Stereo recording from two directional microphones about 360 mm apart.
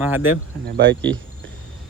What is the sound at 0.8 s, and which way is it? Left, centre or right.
Speech, right.